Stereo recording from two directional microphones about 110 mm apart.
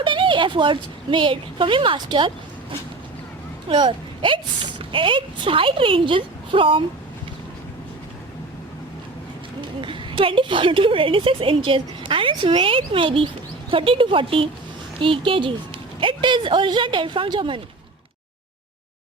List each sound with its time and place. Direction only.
0.0 s speech: 50° right (ahead or behind)
3.7 s speech: 45° right (ahead or behind)
9.6 s a woman's voice: 50° right (ahead or behind)